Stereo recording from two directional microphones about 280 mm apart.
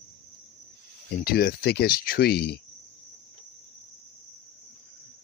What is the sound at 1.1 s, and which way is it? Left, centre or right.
Speech, left.